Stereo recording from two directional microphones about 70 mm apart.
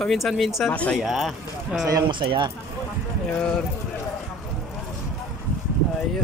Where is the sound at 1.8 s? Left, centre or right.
Right.